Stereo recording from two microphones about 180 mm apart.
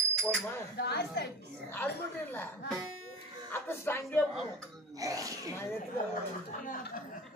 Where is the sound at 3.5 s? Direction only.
10° left (ahead or behind).